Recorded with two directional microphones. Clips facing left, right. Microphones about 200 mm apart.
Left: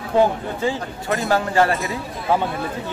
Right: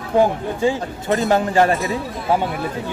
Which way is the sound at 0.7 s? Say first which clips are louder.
Right 4 dB; 20° right (ahead or behind).